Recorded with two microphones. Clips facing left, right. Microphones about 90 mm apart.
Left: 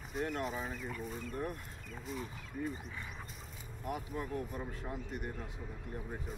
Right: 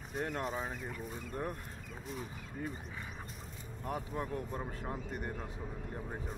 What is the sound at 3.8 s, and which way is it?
Speech, 40° right (ahead or behind).